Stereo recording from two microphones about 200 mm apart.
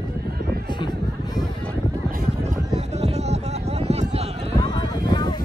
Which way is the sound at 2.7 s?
35° right (ahead or behind).